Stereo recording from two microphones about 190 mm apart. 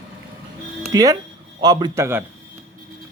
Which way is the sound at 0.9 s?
20° right (ahead or behind).